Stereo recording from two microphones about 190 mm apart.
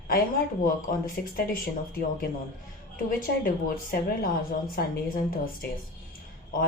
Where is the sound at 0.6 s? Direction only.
45° left (ahead or behind).